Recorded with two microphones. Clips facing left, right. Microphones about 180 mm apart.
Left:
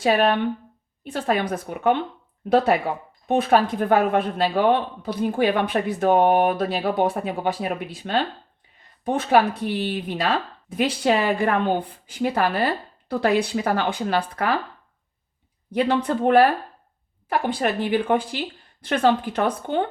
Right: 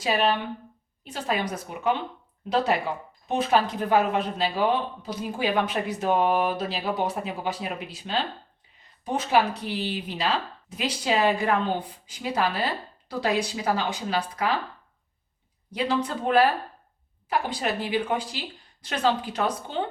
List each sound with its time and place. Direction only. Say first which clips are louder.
0.0 s speech: left 5 dB; 55° left (ahead or behind)
3.2 s speech: left 4 dB; 55° left (ahead or behind)
15.7 s speech: left 5 dB; 55° left (ahead or behind)